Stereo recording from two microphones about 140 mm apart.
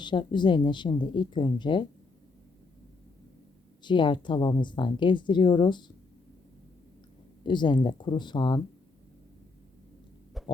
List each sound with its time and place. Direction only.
0.0 s speech: 35° left (ahead or behind)
3.8 s speech: 35° left (ahead or behind)
7.4 s speech: 35° left (ahead or behind)
10.4 s a sound: centre (ahead or behind)